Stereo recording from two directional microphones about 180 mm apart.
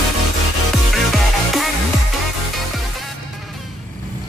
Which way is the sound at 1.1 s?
Centre (ahead or behind).